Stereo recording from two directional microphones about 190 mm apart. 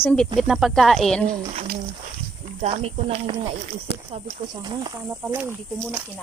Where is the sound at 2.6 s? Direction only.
35° right (ahead or behind).